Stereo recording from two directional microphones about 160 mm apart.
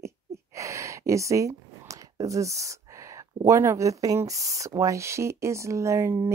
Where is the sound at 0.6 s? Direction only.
20° right (ahead or behind).